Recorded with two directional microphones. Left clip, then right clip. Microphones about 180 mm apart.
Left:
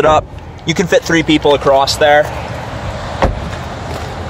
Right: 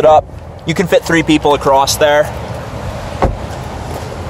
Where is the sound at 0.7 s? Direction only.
Centre (ahead or behind).